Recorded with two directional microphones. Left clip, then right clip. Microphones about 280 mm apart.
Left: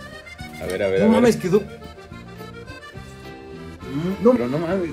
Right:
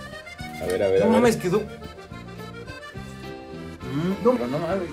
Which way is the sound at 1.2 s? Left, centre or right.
Left.